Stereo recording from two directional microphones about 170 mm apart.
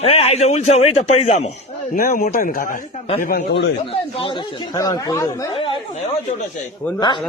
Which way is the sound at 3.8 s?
30° left (ahead or behind).